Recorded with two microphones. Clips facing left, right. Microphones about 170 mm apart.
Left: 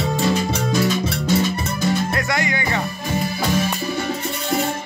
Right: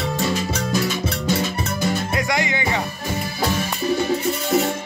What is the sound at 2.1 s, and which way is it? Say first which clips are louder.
Music: even; 20° right (ahead or behind).